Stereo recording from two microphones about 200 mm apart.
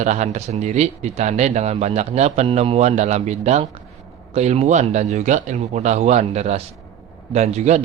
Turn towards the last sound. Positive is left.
turn(degrees=-35)  # may be behind; listen again after turning